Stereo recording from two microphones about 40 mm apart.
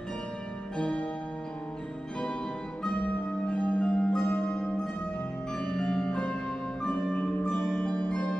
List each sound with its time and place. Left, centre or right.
0.7 s music: left
2.9 s music: left
7.2 s zither: left